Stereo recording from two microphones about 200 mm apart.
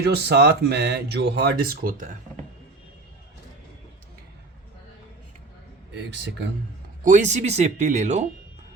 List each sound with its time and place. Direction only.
0.0 s speech: 55° right (ahead or behind); by 2.4 s 40° right (ahead or behind)
5.9 s speech: 65° right (ahead or behind)
7.0 s speech: 40° right (ahead or behind)